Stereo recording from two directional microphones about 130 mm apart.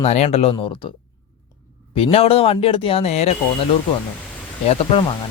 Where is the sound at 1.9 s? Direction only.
50° left (ahead or behind).